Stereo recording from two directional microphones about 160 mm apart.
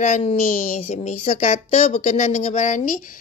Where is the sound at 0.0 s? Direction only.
45° left (ahead or behind).